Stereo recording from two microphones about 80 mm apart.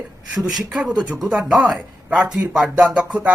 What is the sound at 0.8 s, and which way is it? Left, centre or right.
Speech, centre.